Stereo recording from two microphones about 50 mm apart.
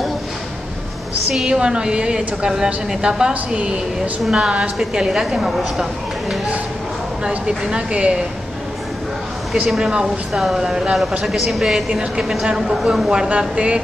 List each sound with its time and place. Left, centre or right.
1.3 s a woman's voice: centre
9.8 s a woman's voice: centre
11.9 s a woman's voice: right
13.3 s speech: right